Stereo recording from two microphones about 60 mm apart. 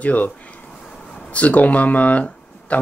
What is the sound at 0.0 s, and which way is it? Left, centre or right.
Speech, left.